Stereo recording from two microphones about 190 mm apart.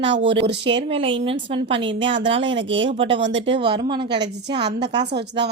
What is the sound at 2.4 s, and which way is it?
A woman's voice, 75° right (ahead or behind).